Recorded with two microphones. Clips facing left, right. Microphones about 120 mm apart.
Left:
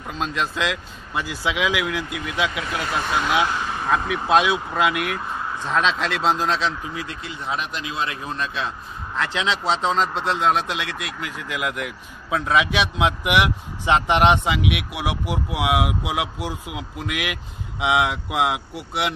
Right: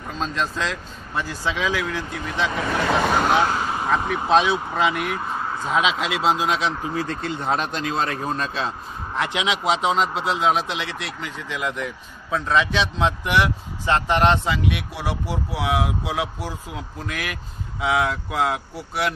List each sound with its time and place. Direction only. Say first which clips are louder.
0.2 s speech: left 1 dB; 5° left (ahead or behind)
3.1 s speech: even; 50° right (ahead or behind)
3.6 s vehicle: right 2 dB; 20° right (ahead or behind)
4.1 s speech: even; 5° left (ahead or behind)
6.8 s speech: right 5 dB; 40° right (ahead or behind)
7.2 s speech: right 5 dB; 55° right (ahead or behind); by 8.7 s 35° right (ahead or behind)
9.1 s speech: even; 15° right (ahead or behind); by 19.1 s 20° left (ahead or behind)